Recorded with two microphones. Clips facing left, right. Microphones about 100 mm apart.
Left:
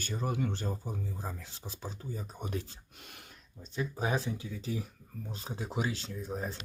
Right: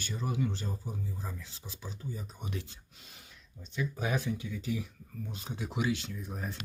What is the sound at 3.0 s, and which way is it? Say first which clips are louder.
Speech: left 5 dB; 60° left (ahead or behind).